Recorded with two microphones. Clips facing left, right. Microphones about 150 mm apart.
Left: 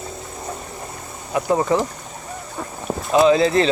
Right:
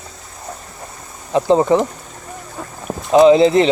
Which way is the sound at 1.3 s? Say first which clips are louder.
Right 5 dB; 25° right (ahead or behind).